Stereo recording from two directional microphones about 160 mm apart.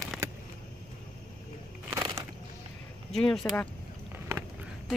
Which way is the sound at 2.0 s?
25° right (ahead or behind).